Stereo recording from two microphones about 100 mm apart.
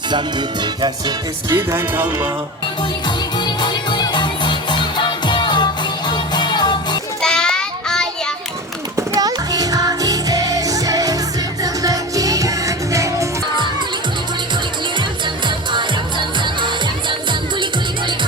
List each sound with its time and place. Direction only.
0.6 s music: 45° right (ahead or behind)
1.5 s music: 25° right (ahead or behind)
3.3 s music: 45° left (ahead or behind)
7.2 s child singing: 5° left (ahead or behind)
9.0 s music: 35° right (ahead or behind)
15.4 s music: 50° right (ahead or behind)